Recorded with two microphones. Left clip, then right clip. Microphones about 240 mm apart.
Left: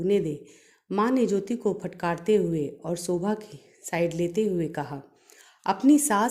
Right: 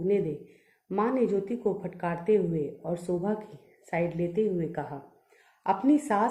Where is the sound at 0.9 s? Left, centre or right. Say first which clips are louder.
Left 2 dB; left.